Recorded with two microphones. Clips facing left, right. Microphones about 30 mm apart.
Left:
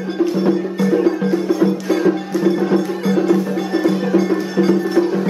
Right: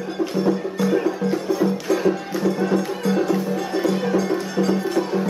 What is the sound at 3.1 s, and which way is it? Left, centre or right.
Music, centre.